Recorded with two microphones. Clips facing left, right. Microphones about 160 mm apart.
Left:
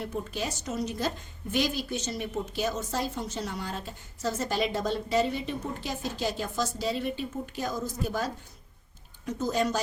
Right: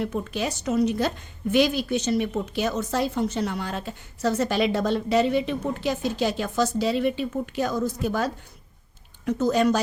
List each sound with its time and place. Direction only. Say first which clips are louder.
0.0 s a woman's voice: right 6 dB; 70° right (ahead or behind)